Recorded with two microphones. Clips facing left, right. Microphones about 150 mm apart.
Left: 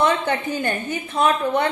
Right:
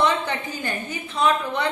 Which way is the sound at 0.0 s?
50° left (ahead or behind).